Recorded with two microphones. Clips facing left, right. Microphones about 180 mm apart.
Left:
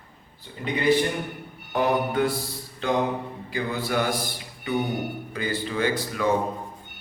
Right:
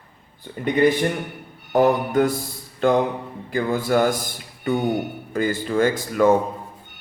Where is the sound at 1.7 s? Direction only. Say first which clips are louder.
Right 6 dB; 45° right (ahead or behind).